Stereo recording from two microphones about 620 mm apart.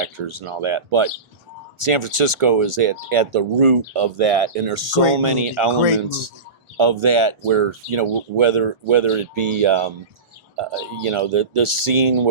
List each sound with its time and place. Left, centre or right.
0.0 s speech: right
5.1 s speech: right
6.7 s speech: right